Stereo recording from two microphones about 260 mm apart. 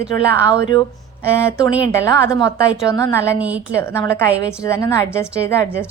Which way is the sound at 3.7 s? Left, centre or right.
Centre.